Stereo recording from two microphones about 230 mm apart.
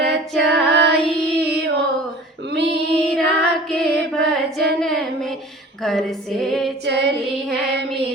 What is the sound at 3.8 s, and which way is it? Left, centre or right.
Music, centre.